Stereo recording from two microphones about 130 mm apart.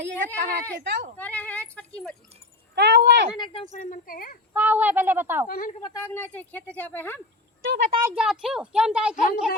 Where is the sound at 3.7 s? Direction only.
75° left (ahead or behind).